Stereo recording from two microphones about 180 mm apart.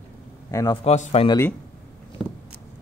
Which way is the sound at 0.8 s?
35° left (ahead or behind).